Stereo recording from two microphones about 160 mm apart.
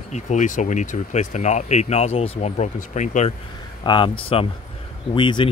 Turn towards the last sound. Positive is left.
turn(degrees=30)  # may be behind; listen again after turning